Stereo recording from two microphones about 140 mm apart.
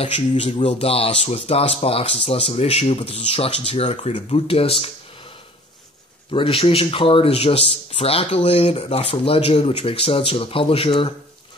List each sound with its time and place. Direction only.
0.6 s speech: 40° left (ahead or behind)
6.3 s speech: 40° left (ahead or behind)